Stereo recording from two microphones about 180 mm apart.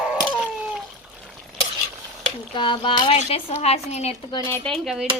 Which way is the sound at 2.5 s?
25° left (ahead or behind).